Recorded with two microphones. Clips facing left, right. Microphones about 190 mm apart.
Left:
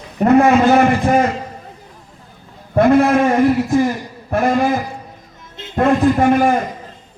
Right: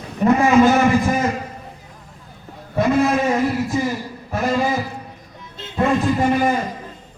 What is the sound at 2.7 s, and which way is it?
A man's voice, 60° left (ahead or behind).